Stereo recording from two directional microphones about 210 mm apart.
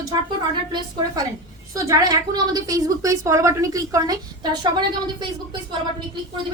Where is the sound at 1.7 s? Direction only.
15° right (ahead or behind).